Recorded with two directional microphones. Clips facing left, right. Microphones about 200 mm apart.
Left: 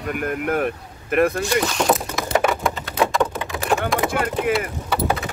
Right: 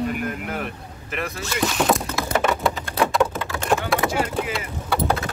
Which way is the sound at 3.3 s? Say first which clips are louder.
Left 1 dB; 15° left (ahead or behind).